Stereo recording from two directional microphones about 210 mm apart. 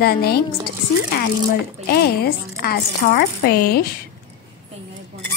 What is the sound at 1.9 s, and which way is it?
A woman's voice, 50° left (ahead or behind).